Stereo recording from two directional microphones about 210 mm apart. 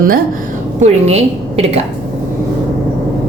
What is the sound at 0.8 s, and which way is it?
Speech, 30° right (ahead or behind).